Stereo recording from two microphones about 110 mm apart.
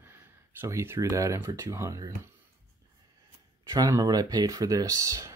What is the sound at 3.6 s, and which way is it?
Speech, 30° right (ahead or behind).